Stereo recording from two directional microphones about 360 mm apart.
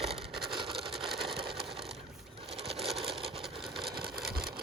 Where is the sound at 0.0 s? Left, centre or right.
Centre.